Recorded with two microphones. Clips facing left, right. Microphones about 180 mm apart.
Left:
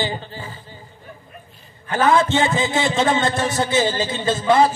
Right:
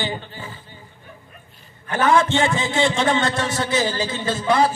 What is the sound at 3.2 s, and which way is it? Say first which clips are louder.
A man's voice: left 2 dB; 30° left (ahead or behind).